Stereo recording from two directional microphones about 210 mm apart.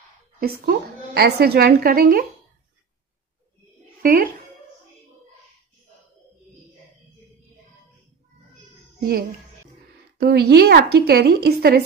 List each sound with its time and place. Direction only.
0.4 s a woman's voice: 50° right (ahead or behind)
4.0 s music: 40° right (ahead or behind)
10.2 s a woman's voice: 50° right (ahead or behind)